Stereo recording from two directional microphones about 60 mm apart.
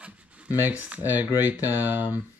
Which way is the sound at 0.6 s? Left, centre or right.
Right.